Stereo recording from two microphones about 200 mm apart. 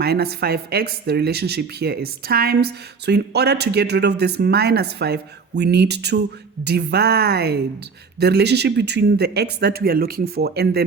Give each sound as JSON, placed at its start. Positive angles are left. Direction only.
{"t": 0.0, "sound": "speech", "side_deg": -50}